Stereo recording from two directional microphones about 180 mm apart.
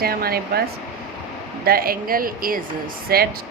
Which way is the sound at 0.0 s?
60° right (ahead or behind).